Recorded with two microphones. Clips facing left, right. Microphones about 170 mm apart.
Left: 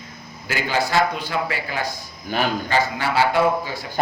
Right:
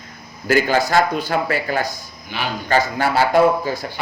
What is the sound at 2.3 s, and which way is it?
Speech, 45° left (ahead or behind).